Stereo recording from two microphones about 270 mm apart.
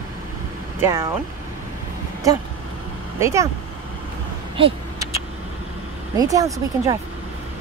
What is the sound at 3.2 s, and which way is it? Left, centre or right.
Speech, centre.